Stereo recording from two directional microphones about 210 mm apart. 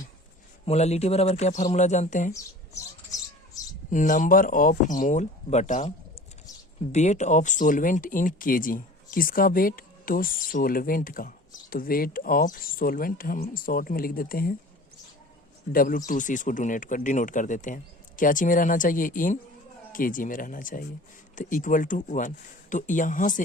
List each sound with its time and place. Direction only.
0.6 s speech: 30° left (ahead or behind)
2.3 s a sound: 15° left (ahead or behind)
3.8 s speech: 40° left (ahead or behind)
15.7 s speech: 40° left (ahead or behind)